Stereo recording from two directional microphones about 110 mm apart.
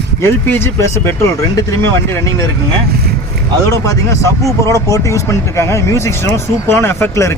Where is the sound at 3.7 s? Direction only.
30° left (ahead or behind).